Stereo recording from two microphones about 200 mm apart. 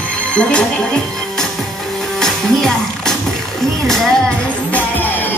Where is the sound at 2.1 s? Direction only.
5° left (ahead or behind).